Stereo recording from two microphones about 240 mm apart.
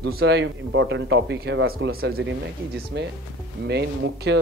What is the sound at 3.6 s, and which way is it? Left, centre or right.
Speech, right.